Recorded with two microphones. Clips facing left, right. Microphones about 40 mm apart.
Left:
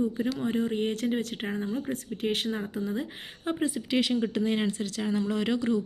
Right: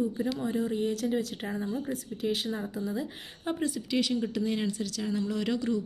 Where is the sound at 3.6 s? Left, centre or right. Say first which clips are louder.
Left 2 dB; left.